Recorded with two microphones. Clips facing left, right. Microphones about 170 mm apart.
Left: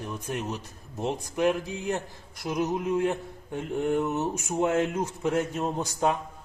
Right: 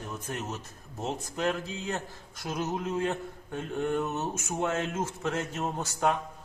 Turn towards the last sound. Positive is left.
turn(degrees=15)  # may be behind; listen again after turning